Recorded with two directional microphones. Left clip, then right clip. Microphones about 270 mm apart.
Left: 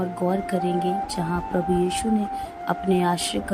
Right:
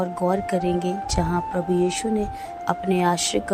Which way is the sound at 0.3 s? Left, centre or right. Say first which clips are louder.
Right 2 dB; centre.